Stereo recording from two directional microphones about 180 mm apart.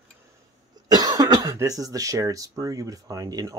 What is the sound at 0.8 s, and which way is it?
Speech, 20° right (ahead or behind).